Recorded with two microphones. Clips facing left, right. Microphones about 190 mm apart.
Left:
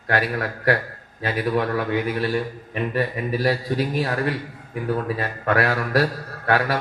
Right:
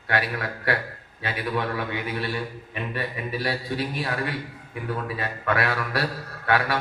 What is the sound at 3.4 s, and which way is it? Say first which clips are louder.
A man's voice: left 6 dB; 35° left (ahead or behind).